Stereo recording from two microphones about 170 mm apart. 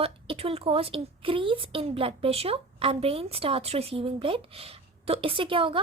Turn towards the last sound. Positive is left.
turn(degrees=-30)  # may be behind; listen again after turning